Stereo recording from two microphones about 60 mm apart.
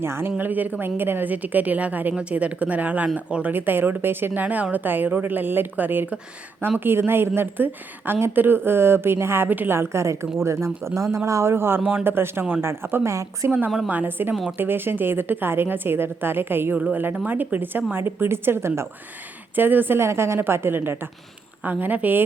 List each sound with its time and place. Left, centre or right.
0.0 s a woman's voice: right
3.5 s a woman's voice: right
9.7 s a woman's voice: right
13.8 s a woman's voice: right
20.0 s a woman's voice: right
21.6 s a woman's voice: right